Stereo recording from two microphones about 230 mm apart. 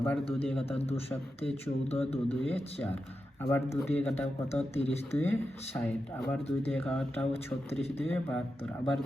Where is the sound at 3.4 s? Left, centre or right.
Centre.